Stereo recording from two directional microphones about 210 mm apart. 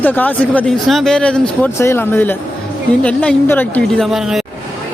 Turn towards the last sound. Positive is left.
turn(degrees=0)  # may be behind; listen again after turning